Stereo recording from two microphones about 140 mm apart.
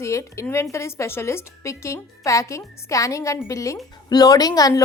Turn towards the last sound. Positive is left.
turn(degrees=25)  # may be behind; listen again after turning